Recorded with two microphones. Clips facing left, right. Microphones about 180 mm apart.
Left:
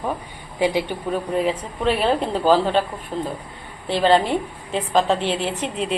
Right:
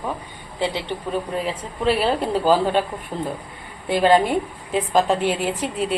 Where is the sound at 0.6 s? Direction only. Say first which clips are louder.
Left 4 dB; 10° left (ahead or behind).